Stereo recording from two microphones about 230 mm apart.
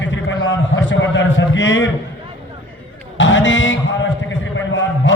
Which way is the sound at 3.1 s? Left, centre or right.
Left.